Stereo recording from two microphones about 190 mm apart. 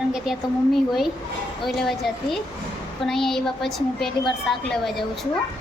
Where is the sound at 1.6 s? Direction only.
Centre (ahead or behind).